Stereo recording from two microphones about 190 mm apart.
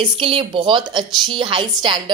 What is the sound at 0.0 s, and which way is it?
A woman's voice, 30° right (ahead or behind).